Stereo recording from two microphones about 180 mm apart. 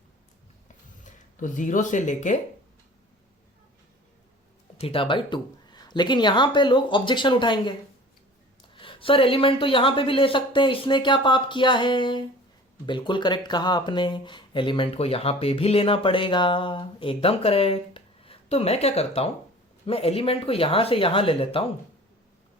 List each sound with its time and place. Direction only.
1.0 s speech: 45° left (ahead or behind)
4.8 s speech: 30° left (ahead or behind)